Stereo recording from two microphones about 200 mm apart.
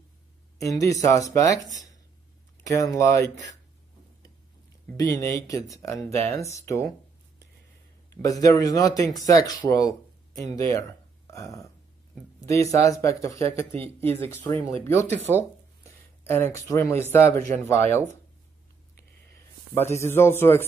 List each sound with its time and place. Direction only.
0.6 s speech: 15° left (ahead or behind)
2.6 s speech: 15° left (ahead or behind)
4.9 s speech: 15° left (ahead or behind)
8.1 s speech: 15° left (ahead or behind)
16.3 s speech: 10° left (ahead or behind)
19.7 s speech: 10° left (ahead or behind)